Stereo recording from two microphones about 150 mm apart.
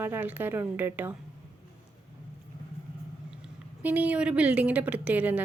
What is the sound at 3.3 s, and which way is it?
A woman's voice, 10° right (ahead or behind).